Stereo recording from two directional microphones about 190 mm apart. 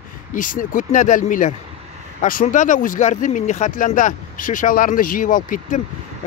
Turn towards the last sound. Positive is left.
turn(degrees=45)  # may be behind; listen again after turning